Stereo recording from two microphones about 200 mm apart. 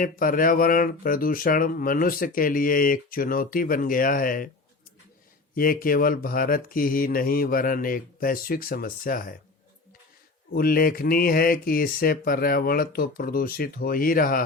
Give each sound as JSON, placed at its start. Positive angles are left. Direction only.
{"t": 0.0, "sound": "speech", "side_deg": 45}
{"t": 5.5, "sound": "speech", "side_deg": 45}
{"t": 10.5, "sound": "speech", "side_deg": 50}